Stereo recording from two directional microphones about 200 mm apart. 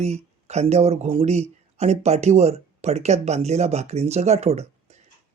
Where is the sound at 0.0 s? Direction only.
35° right (ahead or behind).